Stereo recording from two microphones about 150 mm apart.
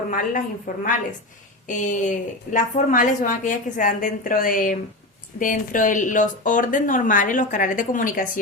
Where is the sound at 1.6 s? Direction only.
55° left (ahead or behind).